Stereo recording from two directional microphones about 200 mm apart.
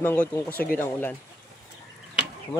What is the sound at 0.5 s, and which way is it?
Speech, 50° left (ahead or behind).